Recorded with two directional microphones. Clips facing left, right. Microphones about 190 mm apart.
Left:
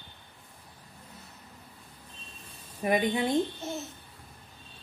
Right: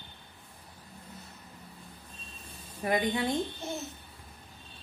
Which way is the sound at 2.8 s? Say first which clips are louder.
Left 2 dB; 20° left (ahead or behind).